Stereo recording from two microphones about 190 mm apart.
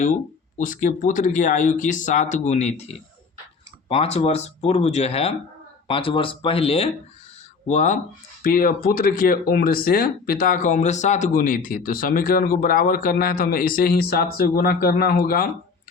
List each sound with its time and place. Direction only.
0.6 s speech: 45° left (ahead or behind)